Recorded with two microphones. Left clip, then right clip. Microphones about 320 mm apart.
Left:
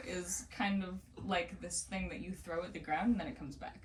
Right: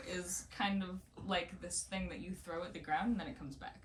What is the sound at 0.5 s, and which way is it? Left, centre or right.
Speech, centre.